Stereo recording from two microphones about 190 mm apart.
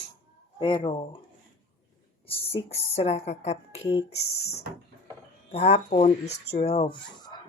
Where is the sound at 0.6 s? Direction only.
25° left (ahead or behind).